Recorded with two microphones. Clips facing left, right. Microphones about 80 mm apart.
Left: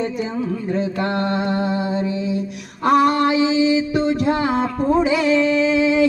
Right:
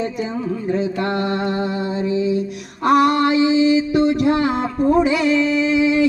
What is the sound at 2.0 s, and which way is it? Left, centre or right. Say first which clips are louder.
Music: right 3 dB; centre.